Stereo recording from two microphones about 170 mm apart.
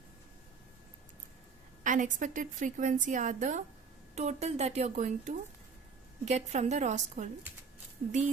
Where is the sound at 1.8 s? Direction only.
50° right (ahead or behind).